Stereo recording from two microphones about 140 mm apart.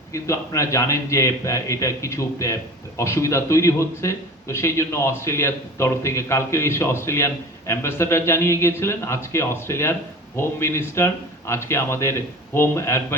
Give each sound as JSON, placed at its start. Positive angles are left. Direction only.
{"t": 0.1, "sound": "a man's voice", "side_deg": 20}